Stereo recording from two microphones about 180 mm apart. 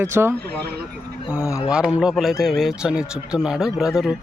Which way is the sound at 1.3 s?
15° left (ahead or behind).